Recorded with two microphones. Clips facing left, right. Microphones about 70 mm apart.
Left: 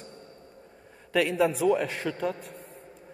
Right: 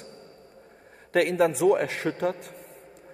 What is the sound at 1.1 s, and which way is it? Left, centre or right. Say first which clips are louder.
Speech: right 2 dB; right.